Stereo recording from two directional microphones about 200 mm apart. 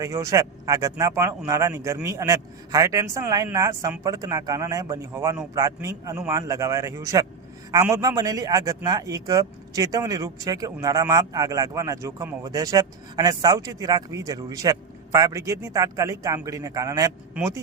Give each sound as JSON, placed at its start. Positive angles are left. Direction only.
{"t": 0.0, "sound": "a man's voice", "side_deg": -15}